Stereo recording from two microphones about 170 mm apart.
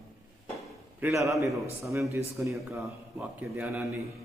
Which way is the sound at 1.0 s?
15° right (ahead or behind).